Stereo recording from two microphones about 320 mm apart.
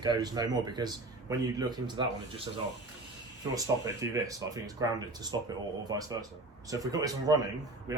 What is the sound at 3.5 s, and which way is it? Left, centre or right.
Speech, centre.